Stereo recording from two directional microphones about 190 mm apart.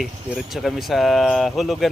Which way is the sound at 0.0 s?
Centre (ahead or behind).